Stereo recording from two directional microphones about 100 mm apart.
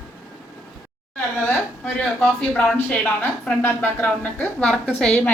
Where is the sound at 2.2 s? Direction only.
15° left (ahead or behind).